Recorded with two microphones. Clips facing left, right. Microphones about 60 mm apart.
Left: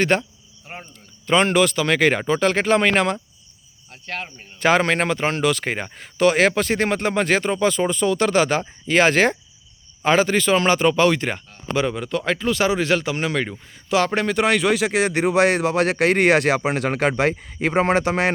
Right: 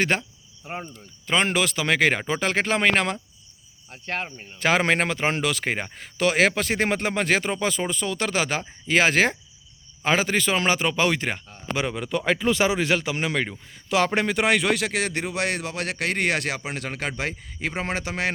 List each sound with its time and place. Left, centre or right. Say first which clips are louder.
0.0 s speech: left 4 dB; centre
3.9 s speech: right 1 dB; right
4.8 s speech: left 2 dB; centre; by 16.6 s left
16.6 s speech: left 10 dB; left